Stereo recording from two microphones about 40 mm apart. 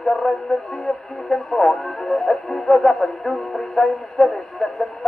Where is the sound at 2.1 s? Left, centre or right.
Centre.